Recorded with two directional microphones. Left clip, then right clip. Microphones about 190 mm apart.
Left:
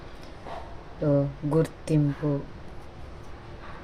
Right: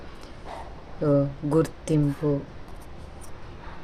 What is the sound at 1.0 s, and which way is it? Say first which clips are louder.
Speech: right 2 dB; 25° right (ahead or behind).